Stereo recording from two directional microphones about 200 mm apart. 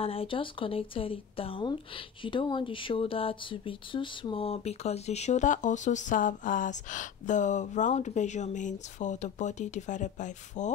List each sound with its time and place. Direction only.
0.0 s speech: 30° left (ahead or behind)